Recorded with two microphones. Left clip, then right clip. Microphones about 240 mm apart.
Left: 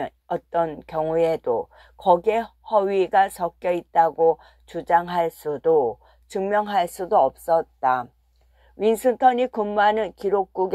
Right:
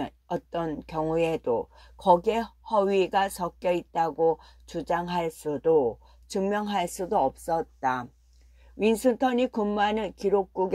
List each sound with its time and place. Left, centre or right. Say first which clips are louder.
0.0 s speech: left 5 dB; left
6.2 s speech: left 2 dB; left
6.6 s speech: left 6 dB; left